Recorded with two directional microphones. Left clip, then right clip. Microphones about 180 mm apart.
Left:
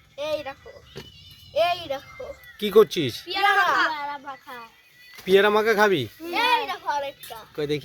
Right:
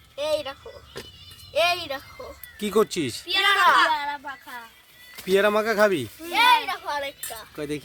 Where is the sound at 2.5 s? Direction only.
15° right (ahead or behind).